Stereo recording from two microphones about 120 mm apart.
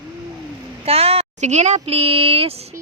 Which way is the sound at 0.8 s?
55° right (ahead or behind).